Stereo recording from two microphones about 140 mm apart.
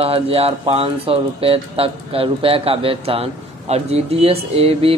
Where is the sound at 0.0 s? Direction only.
45° right (ahead or behind).